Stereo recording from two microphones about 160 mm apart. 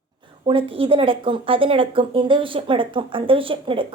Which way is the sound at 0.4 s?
35° right (ahead or behind).